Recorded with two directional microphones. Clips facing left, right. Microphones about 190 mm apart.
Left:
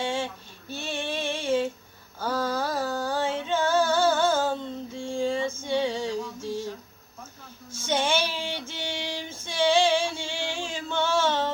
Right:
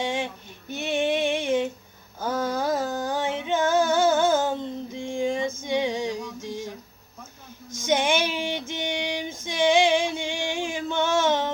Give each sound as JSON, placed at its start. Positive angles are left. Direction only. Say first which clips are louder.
{"t": 0.0, "sound": "female singing", "louder": "right 1 dB", "side_deg": -15}
{"t": 2.1, "sound": "a sound", "louder": "right 1 dB", "side_deg": -15}
{"t": 7.7, "sound": "child singing", "louder": "right 3 dB", "side_deg": -15}